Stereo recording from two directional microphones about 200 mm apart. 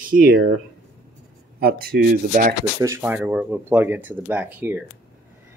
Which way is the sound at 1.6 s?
50° right (ahead or behind).